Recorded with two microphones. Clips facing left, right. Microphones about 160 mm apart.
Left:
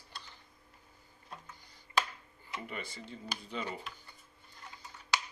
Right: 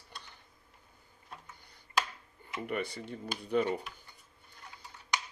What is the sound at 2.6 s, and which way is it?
Speech, 60° right (ahead or behind).